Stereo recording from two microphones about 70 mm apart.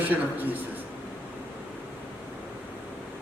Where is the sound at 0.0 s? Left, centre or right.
Right.